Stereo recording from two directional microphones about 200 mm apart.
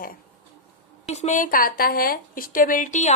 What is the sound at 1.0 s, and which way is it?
A woman's voice, 35° left (ahead or behind).